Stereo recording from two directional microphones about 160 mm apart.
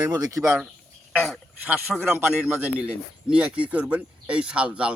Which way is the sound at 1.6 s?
10° right (ahead or behind).